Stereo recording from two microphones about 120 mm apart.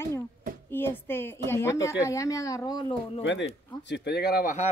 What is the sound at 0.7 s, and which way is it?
A woman's voice, 20° left (ahead or behind).